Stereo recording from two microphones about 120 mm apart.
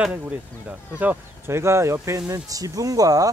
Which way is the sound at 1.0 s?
15° right (ahead or behind).